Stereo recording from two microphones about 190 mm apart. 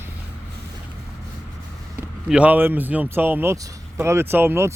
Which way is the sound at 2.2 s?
5° right (ahead or behind).